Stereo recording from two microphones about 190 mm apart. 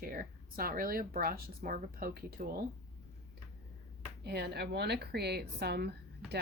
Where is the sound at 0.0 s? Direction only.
50° right (ahead or behind).